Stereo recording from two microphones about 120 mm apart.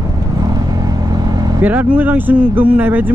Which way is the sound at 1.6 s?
15° right (ahead or behind).